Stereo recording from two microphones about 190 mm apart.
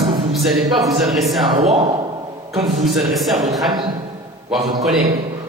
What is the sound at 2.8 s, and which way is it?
Speech, centre (ahead or behind).